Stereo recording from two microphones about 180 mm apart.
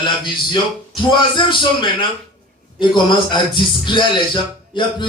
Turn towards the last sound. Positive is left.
turn(degrees=25)  # may be behind; listen again after turning